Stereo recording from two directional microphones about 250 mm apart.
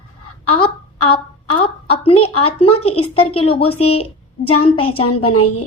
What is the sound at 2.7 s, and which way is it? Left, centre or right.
A woman's voice, left.